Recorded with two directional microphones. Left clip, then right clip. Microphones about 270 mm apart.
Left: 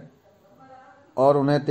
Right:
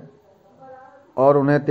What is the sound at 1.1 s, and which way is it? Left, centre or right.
Speech, centre.